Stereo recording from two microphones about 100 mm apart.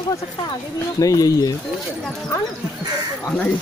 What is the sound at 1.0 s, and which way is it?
Speech, 35° left (ahead or behind).